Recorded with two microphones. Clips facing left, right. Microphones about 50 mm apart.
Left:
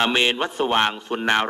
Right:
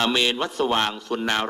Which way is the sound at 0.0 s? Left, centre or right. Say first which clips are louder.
Left 2 dB; left.